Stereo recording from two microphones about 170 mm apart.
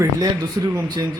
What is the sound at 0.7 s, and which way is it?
Speech, 25° right (ahead or behind).